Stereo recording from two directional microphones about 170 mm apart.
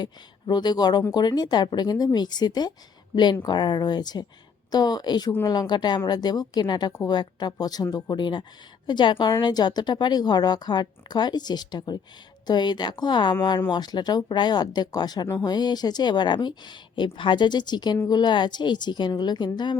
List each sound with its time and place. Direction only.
0.0 s speech: 25° left (ahead or behind)